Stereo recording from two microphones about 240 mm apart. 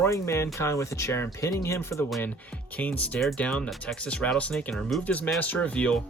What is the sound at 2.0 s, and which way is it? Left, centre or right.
Speech, centre.